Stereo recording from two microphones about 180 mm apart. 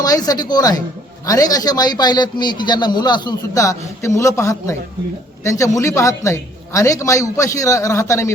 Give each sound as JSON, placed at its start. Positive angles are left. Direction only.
{"t": 0.0, "sound": "a man's voice", "side_deg": 20}